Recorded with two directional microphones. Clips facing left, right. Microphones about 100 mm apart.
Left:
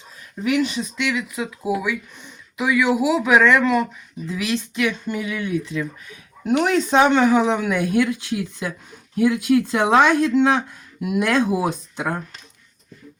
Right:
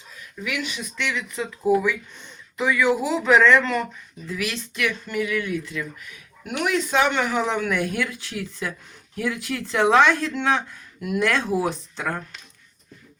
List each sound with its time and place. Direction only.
0.4 s speech: 35° left (ahead or behind)
0.9 s speech: 15° left (ahead or behind)